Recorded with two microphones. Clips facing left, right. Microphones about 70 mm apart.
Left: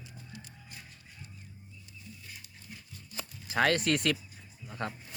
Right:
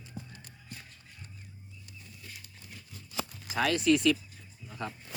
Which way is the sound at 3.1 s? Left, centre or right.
Right.